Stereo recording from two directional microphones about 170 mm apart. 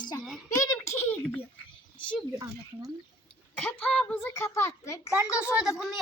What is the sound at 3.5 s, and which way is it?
A child's voice, 10° left (ahead or behind).